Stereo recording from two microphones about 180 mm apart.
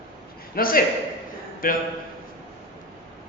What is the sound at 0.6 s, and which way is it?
A man's voice, 55° left (ahead or behind).